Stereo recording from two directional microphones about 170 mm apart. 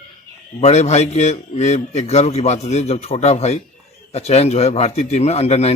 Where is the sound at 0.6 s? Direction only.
40° left (ahead or behind).